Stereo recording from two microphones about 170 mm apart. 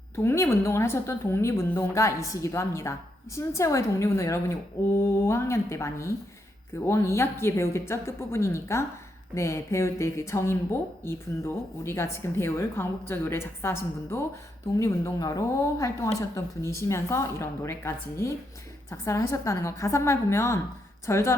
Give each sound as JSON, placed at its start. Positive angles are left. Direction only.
{"t": 0.2, "sound": "speech", "side_deg": 15}